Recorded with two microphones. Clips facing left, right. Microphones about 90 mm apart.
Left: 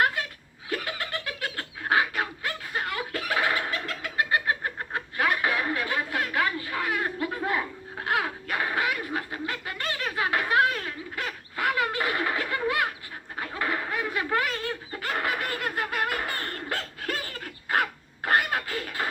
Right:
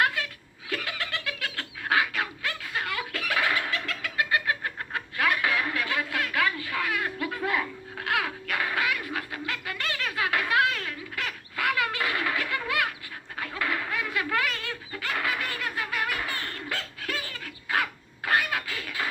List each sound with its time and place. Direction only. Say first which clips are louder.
0.0 s chuckle: left 1 dB; 30° left (ahead or behind)
0.7 s laughter: left 1 dB; 30° left (ahead or behind)
13.3 s a sound: left 1 dB; 30° left (ahead or behind)